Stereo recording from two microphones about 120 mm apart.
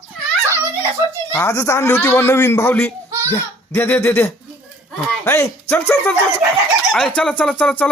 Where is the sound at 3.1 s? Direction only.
25° right (ahead or behind).